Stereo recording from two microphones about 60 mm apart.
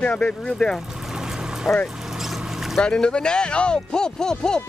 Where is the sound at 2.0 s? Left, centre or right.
Centre.